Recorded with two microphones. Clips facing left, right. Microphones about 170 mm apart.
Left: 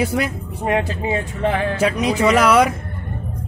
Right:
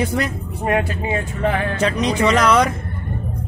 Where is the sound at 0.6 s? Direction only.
20° left (ahead or behind).